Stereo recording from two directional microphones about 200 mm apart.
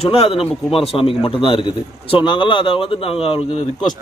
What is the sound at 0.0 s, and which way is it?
A man's voice, 30° left (ahead or behind).